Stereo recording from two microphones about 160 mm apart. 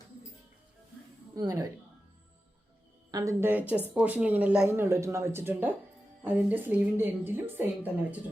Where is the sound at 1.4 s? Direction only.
20° right (ahead or behind).